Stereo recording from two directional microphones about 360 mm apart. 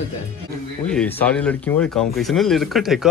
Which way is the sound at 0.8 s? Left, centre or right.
Centre.